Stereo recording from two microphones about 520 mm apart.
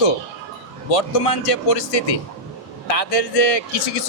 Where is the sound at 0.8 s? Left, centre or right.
Left.